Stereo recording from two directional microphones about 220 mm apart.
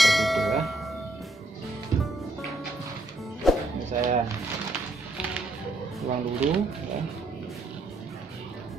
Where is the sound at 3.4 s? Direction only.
Centre (ahead or behind).